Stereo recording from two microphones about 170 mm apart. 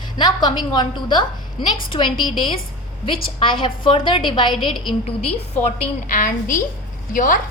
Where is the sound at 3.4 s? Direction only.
30° left (ahead or behind).